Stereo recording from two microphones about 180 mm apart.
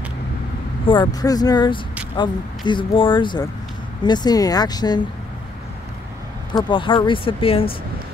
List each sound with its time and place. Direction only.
0.8 s speech: 25° left (ahead or behind)
6.5 s speech: 30° left (ahead or behind)